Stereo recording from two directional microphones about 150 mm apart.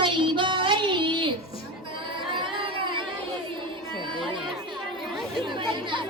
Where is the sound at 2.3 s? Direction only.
35° right (ahead or behind).